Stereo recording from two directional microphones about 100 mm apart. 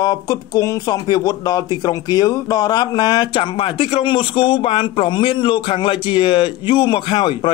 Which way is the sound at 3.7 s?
65° left (ahead or behind).